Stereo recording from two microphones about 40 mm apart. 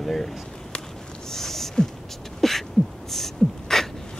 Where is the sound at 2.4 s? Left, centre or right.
Centre.